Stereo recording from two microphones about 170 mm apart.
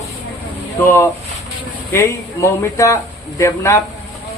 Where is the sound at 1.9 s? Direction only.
15° left (ahead or behind).